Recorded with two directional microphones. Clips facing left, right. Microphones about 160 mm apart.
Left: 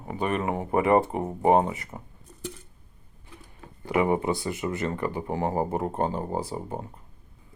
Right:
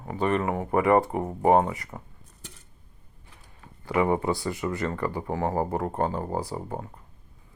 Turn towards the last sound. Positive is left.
turn(degrees=25)  # may be behind; listen again after turning